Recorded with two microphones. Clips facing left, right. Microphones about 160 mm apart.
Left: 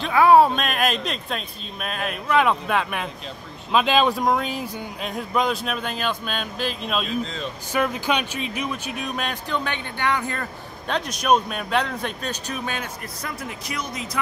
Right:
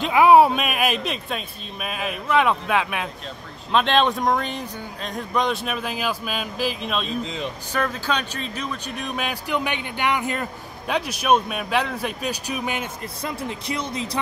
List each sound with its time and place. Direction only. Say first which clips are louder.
0.0 s speech: right 1 dB; 15° right (ahead or behind)
7.2 s speech: right 2 dB; 15° right (ahead or behind)
7.7 s speech: left 2 dB; 15° left (ahead or behind); by 9.4 s 5° right (ahead or behind)
9.5 s speech: right 2 dB; 15° right (ahead or behind)
10.9 s speech: even; 5° right (ahead or behind); by 14.2 s 30° right (ahead or behind)